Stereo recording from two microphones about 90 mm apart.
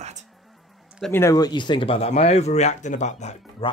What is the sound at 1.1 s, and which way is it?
Speech, 30° left (ahead or behind).